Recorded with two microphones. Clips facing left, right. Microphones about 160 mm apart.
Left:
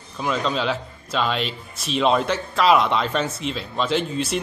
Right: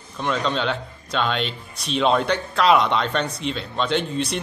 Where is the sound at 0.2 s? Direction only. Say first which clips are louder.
Even; 5° left (ahead or behind).